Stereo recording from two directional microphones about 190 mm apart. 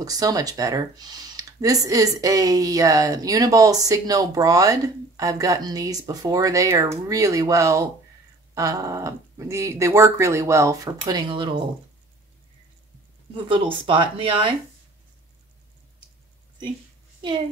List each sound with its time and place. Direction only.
0.0 s speech: 20° right (ahead or behind)
13.3 s speech: 25° right (ahead or behind)